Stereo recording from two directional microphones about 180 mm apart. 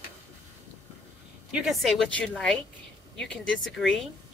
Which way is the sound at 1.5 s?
5° right (ahead or behind).